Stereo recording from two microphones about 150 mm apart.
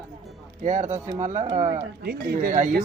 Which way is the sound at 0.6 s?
50° right (ahead or behind).